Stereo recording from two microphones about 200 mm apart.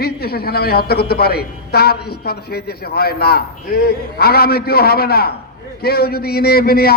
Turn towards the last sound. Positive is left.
turn(degrees=50)  # may be behind; listen again after turning